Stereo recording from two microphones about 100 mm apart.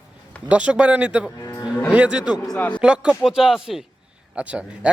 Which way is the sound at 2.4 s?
15° left (ahead or behind).